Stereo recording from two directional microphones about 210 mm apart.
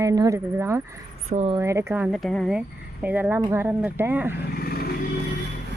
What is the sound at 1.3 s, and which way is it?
Speech, 30° right (ahead or behind).